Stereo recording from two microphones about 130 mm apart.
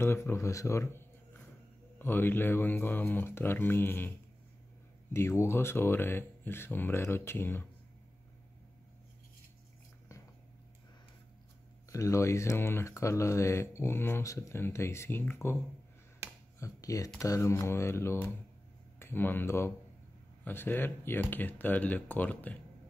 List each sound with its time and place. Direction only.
0.0 s speech: 20° left (ahead or behind)
5.1 s speech: 20° left (ahead or behind)
11.9 s speech: 25° left (ahead or behind)
16.2 s finger snapping: 20° right (ahead or behind)
16.5 s speech: 25° left (ahead or behind)